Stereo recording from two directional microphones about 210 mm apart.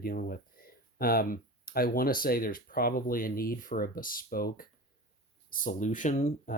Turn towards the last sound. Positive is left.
turn(degrees=35)  # may be behind; listen again after turning